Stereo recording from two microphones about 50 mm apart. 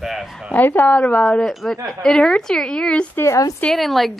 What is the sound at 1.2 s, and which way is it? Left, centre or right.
A woman's voice, centre.